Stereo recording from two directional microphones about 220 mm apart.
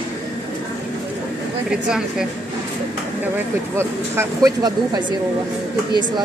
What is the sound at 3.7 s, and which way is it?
Speech, 10° right (ahead or behind).